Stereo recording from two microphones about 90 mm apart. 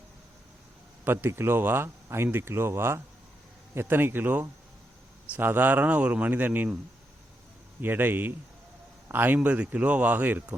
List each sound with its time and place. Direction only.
1.0 s speech: 25° right (ahead or behind)
7.8 s speech: 20° right (ahead or behind)